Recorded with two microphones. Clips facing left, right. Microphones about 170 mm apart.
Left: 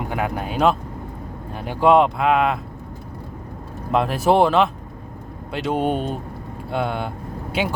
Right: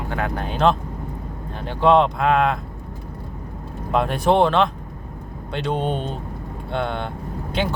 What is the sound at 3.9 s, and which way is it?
Speech, centre (ahead or behind).